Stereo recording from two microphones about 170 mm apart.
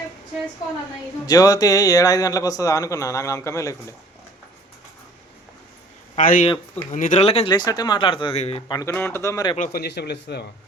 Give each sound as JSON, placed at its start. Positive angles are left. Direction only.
{"t": 1.3, "sound": "speech", "side_deg": 20}
{"t": 6.1, "sound": "speech", "side_deg": 50}
{"t": 7.5, "sound": "speech", "side_deg": 25}
{"t": 9.6, "sound": "speech", "side_deg": 70}